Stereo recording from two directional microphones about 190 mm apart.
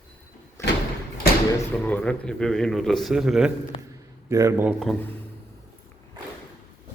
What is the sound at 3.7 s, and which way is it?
Speech, 25° left (ahead or behind).